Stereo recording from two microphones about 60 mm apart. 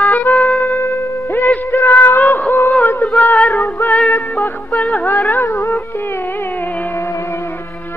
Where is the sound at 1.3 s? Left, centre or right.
Left.